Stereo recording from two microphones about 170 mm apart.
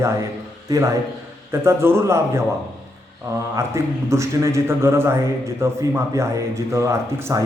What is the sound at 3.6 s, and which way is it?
A man's voice, 15° right (ahead or behind).